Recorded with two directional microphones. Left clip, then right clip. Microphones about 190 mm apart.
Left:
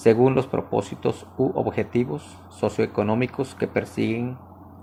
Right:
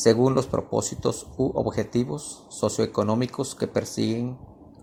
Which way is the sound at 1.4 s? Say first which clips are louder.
Left 2 dB; 30° right (ahead or behind).